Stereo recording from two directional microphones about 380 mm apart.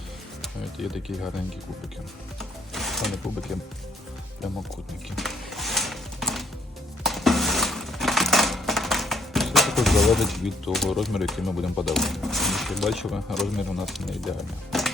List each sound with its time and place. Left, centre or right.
0.4 s speech: centre
2.4 s music: centre
5.1 s a sound: centre
7.0 s coin: centre